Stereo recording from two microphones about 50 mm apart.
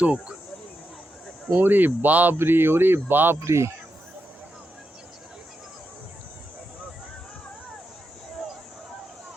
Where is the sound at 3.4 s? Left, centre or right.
Right.